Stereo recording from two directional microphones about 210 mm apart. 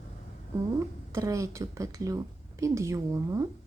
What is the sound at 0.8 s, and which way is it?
A woman's voice, 15° right (ahead or behind).